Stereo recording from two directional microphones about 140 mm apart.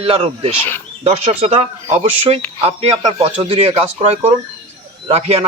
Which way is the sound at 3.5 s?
40° right (ahead or behind).